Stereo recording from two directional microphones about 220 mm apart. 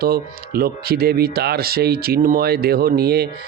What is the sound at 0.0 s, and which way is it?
A man's voice, 45° right (ahead or behind).